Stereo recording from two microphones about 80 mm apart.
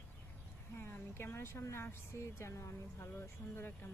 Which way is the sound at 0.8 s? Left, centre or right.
Left.